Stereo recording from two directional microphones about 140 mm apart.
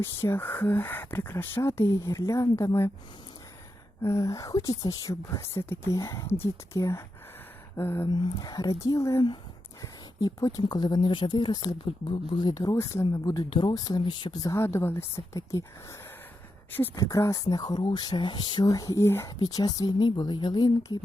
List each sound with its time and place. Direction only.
0.0 s speech: 15° left (ahead or behind)
4.0 s speech: 20° left (ahead or behind)
8.0 s speech: 30° left (ahead or behind)
13.3 s speech: 30° left (ahead or behind)